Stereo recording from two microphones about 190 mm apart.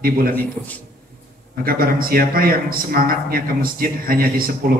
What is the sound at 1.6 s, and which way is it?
A man's voice, 50° right (ahead or behind).